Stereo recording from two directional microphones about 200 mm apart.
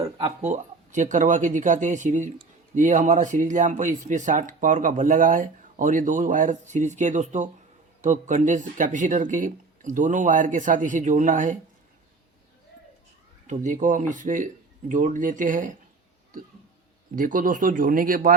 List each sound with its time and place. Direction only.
0.2 s speech: 30° right (ahead or behind)
13.5 s speech: 40° right (ahead or behind)
17.2 s speech: 40° right (ahead or behind)